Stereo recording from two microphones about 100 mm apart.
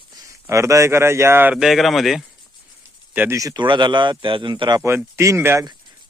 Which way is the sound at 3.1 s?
15° right (ahead or behind).